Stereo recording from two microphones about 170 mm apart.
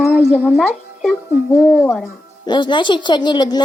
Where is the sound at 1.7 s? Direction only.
15° left (ahead or behind).